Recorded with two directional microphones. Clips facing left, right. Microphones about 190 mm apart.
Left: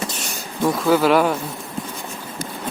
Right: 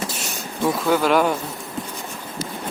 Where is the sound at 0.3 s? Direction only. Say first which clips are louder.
Left 1 dB; centre (ahead or behind).